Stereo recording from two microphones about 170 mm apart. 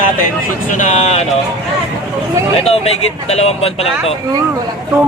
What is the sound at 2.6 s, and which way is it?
Speech, 35° left (ahead or behind).